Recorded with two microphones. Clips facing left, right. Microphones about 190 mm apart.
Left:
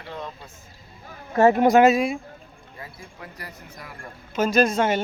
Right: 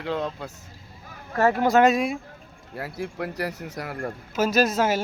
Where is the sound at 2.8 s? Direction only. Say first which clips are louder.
Right 11 dB; 75° right (ahead or behind).